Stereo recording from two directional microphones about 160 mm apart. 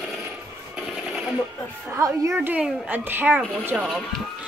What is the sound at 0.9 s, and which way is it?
Sewing machine, centre (ahead or behind).